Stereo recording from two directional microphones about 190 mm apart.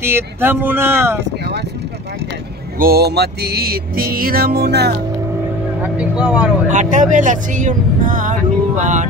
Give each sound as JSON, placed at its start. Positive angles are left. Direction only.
{"t": 0.0, "sound": "speech", "side_deg": -10}
{"t": 2.8, "sound": "music", "side_deg": -55}
{"t": 5.8, "sound": "speech", "side_deg": -5}
{"t": 6.7, "sound": "speech", "side_deg": -40}